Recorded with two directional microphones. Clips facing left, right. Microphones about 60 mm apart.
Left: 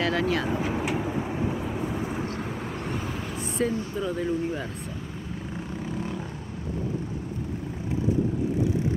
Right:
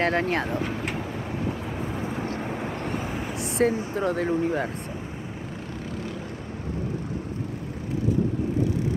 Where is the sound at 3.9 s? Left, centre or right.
Right.